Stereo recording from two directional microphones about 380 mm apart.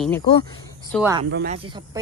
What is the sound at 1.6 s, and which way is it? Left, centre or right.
Speech, centre.